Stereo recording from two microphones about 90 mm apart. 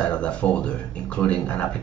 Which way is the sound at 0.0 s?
10° left (ahead or behind).